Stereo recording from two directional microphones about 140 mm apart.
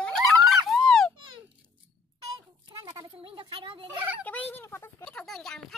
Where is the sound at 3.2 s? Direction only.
40° right (ahead or behind).